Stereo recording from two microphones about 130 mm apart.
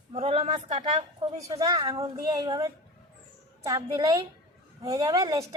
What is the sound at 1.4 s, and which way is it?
A woman's voice, 25° right (ahead or behind).